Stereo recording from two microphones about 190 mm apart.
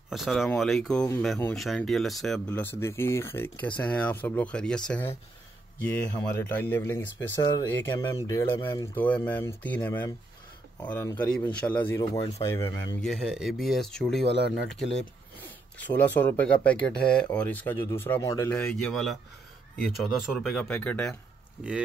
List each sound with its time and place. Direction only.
0.1 s speech: centre (ahead or behind)
12.1 s speech: 30° left (ahead or behind)
12.4 s speech: 15° left (ahead or behind)
13.0 s speech: centre (ahead or behind)
15.9 s speech: 10° left (ahead or behind)
18.5 s speech: 5° left (ahead or behind)